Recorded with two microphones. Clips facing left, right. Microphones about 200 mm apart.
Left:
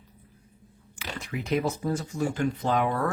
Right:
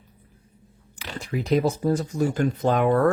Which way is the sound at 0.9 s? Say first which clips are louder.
Right 5 dB; 35° right (ahead or behind).